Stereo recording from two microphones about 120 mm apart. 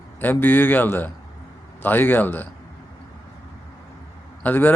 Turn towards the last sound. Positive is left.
turn(degrees=15)  # may be behind; listen again after turning